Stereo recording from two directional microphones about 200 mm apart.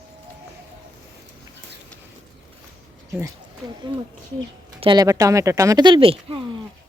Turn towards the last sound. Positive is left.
turn(degrees=-25)  # may be behind; listen again after turning